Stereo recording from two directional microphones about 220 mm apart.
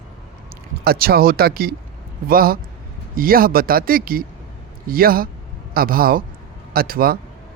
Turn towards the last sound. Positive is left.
turn(degrees=-40)  # may be behind; listen again after turning